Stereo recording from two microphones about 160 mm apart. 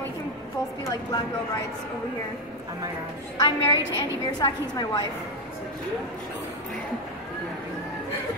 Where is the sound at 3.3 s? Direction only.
20° left (ahead or behind).